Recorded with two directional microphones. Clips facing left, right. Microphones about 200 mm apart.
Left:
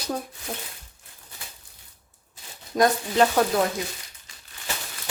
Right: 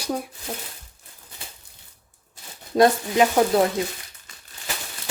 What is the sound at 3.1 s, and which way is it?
Speech, 15° right (ahead or behind).